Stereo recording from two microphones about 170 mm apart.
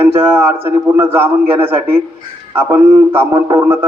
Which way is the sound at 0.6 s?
15° right (ahead or behind).